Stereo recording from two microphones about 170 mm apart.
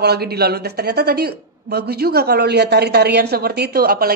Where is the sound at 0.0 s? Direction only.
70° right (ahead or behind).